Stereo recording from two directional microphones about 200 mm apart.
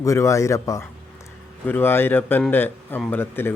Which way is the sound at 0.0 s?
15° left (ahead or behind).